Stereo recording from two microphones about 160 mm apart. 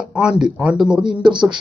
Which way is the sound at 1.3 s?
30° right (ahead or behind).